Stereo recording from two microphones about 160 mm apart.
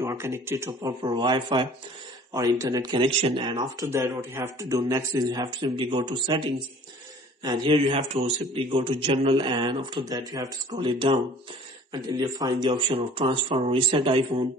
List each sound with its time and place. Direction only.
0.0 s a man's voice: 15° right (ahead or behind)